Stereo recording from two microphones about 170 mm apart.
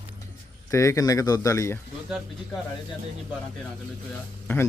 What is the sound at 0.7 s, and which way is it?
Speech, 15° left (ahead or behind).